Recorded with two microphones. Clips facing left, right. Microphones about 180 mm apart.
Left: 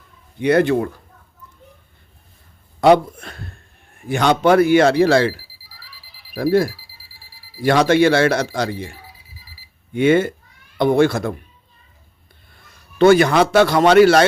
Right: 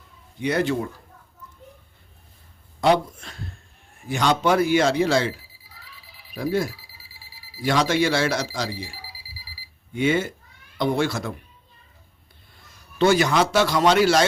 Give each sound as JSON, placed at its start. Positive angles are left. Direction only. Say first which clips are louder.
{"t": 0.3, "sound": "speech", "louder": "left 7 dB", "side_deg": 60}
{"t": 2.8, "sound": "speech", "louder": "left 7 dB", "side_deg": 60}
{"t": 6.3, "sound": "speech", "louder": "left 7 dB", "side_deg": 60}
{"t": 13.0, "sound": "speech", "louder": "left 6 dB", "side_deg": 55}